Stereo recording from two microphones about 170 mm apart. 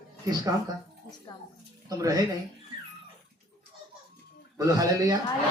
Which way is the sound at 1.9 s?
20° right (ahead or behind).